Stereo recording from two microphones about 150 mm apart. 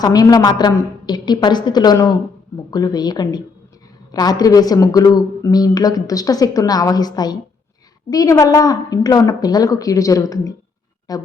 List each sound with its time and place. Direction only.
0.0 s a woman's voice: 25° left (ahead or behind)